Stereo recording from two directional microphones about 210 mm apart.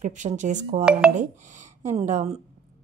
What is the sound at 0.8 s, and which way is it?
Speech, 5° right (ahead or behind).